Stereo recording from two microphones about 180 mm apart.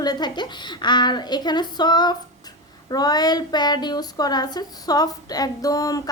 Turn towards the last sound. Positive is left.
turn(degrees=20)  # may be behind; listen again after turning